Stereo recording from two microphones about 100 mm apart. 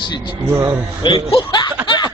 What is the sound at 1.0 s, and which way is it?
Speech, 65° left (ahead or behind).